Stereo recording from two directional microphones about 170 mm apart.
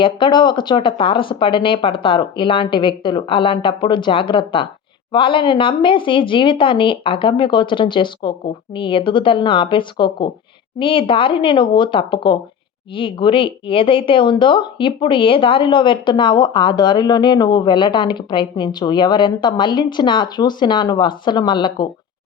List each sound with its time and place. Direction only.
0.0 s speech: 30° left (ahead or behind)